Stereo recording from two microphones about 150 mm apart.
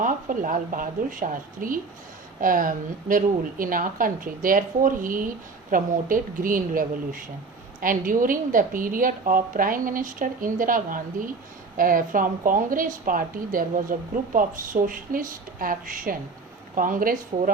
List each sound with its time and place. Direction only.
0.0 s a woman's voice: 65° right (ahead or behind)